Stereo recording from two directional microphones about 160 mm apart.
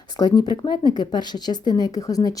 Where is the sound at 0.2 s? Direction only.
25° left (ahead or behind).